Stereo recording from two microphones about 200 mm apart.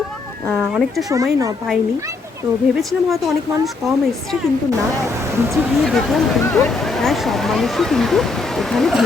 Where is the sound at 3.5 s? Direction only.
15° right (ahead or behind).